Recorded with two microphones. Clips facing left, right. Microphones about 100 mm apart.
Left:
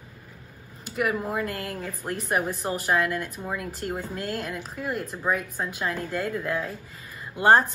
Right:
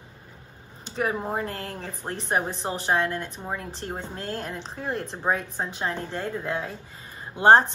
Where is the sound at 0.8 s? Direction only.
30° right (ahead or behind).